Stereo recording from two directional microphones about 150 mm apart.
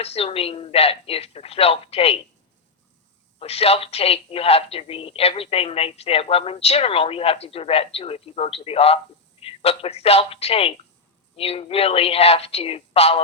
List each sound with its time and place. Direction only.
0.0 s speech: 45° left (ahead or behind)
3.3 s speech: 40° left (ahead or behind)